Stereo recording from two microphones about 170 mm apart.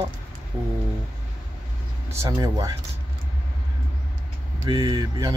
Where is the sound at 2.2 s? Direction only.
20° right (ahead or behind).